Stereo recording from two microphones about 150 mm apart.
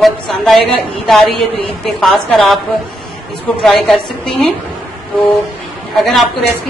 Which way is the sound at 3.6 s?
5° left (ahead or behind).